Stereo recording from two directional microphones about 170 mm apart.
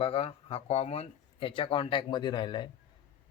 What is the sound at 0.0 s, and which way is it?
Speech, 35° left (ahead or behind).